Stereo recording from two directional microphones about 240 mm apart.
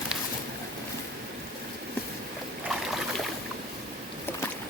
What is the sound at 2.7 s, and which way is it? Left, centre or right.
Boat, centre.